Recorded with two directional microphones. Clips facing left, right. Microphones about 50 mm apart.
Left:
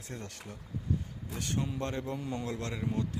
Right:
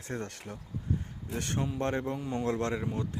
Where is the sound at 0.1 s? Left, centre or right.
Right.